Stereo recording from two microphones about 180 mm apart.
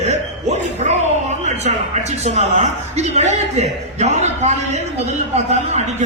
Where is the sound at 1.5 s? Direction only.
40° right (ahead or behind).